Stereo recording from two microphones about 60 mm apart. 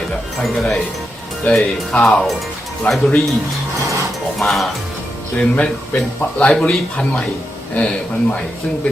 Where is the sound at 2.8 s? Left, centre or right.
Left.